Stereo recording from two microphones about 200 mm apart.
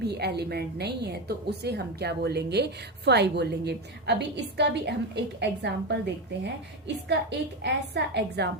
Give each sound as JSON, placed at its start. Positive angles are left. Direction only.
{"t": 0.0, "sound": "a woman's voice", "side_deg": -55}